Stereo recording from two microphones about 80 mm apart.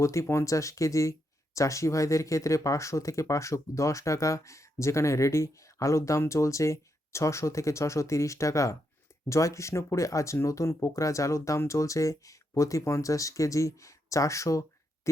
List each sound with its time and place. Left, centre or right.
0.0 s speech: left